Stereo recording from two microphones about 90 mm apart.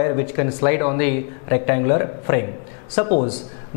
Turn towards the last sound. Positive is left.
turn(degrees=10)  # may be behind; listen again after turning